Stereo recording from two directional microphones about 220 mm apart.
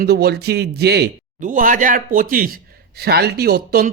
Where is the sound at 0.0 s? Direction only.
45° right (ahead or behind).